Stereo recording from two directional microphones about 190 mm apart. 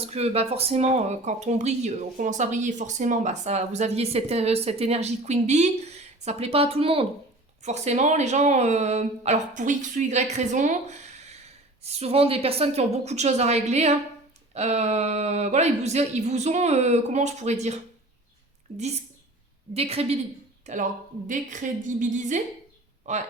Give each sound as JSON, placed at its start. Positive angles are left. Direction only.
{"t": 0.0, "sound": "speech", "side_deg": -30}
{"t": 19.7, "sound": "speech", "side_deg": -30}